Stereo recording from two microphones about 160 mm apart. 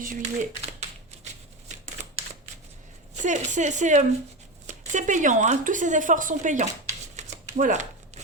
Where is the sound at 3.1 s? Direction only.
50° right (ahead or behind).